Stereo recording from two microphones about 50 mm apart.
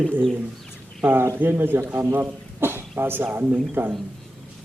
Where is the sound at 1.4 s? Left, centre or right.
Right.